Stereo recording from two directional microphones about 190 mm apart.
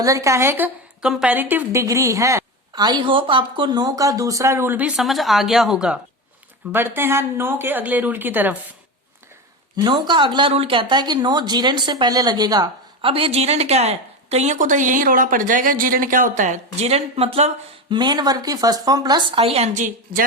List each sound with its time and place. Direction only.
0.0 s a woman's voice: 15° right (ahead or behind)
9.8 s speech: 25° right (ahead or behind)
17.9 s speech: 20° right (ahead or behind)
19.4 s speech: 30° right (ahead or behind)